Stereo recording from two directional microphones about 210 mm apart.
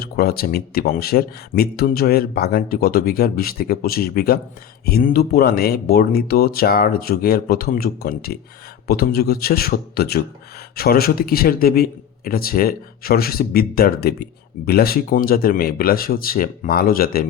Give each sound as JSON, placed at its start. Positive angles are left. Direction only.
{"t": 0.0, "sound": "a man's voice", "side_deg": 45}